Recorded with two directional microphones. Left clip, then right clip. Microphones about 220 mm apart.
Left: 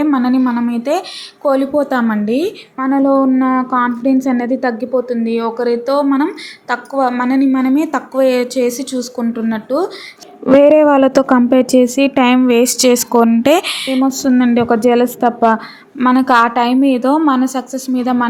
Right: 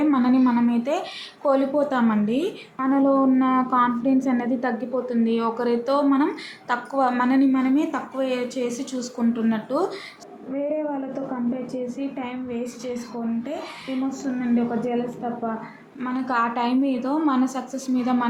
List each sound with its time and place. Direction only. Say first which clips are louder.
0.0 s a sound: left 6 dB; 25° left (ahead or behind)
1.5 s a woman's voice: left 7 dB; 20° left (ahead or behind)
10.6 s a woman's voice: left 17 dB; 45° left (ahead or behind)
14.0 s a woman's voice: left 14 dB; 45° left (ahead or behind)
16.0 s a woman's voice: left 13 dB; 40° left (ahead or behind)